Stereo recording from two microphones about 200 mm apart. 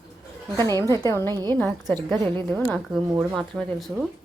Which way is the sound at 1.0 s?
15° left (ahead or behind).